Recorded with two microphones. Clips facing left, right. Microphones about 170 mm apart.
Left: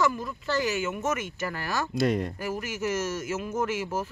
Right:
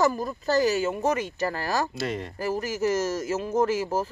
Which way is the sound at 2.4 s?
35° right (ahead or behind).